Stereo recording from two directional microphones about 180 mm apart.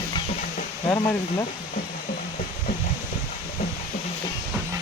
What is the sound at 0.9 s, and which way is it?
Speech, 15° left (ahead or behind).